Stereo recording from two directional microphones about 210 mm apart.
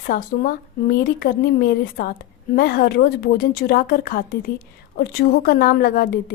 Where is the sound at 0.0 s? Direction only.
45° left (ahead or behind).